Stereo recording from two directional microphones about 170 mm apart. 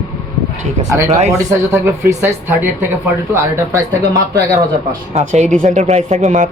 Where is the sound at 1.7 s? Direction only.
15° right (ahead or behind).